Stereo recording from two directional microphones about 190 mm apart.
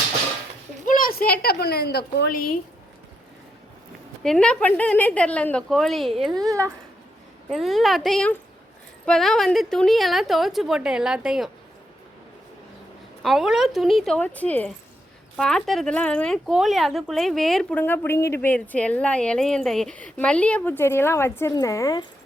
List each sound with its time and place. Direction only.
0.9 s a woman's voice: 45° left (ahead or behind)
4.2 s speech: 5° left (ahead or behind)
6.3 s speech: 20° right (ahead or behind)
7.5 s speech: centre (ahead or behind)
13.2 s speech: centre (ahead or behind); by 22.0 s 20° left (ahead or behind)